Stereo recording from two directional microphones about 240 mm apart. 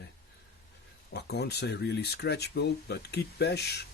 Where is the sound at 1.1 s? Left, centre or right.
Left.